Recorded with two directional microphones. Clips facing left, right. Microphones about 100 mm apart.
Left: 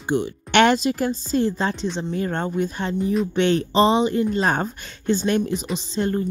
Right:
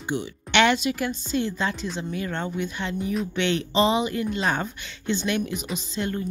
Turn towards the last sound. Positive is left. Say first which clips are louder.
# left 5 dB
turn(degrees=35)  # may be behind; listen again after turning